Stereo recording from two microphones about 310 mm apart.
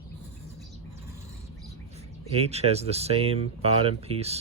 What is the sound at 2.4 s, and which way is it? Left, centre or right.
Speech, centre.